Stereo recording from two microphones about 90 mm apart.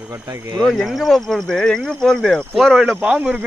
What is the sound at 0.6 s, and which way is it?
Speech, centre (ahead or behind).